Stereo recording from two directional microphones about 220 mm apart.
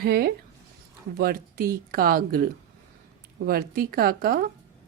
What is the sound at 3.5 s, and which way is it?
A woman's voice, 40° right (ahead or behind).